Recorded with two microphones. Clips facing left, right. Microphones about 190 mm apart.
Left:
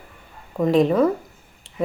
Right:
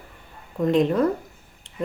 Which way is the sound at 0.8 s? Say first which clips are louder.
Left 4 dB; 90° left.